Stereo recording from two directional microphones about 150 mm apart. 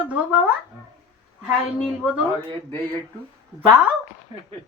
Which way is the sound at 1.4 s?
5° right (ahead or behind).